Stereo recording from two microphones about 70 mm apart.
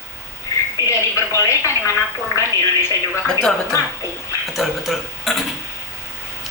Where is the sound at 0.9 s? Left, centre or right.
Left.